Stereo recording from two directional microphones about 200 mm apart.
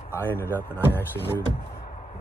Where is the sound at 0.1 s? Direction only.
10° left (ahead or behind).